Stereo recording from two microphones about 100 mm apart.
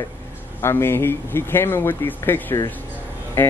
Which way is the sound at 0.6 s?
25° left (ahead or behind).